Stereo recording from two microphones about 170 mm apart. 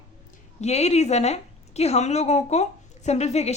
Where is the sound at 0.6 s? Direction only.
40° left (ahead or behind).